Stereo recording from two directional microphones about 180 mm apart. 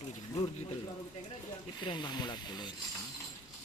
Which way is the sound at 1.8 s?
25° left (ahead or behind).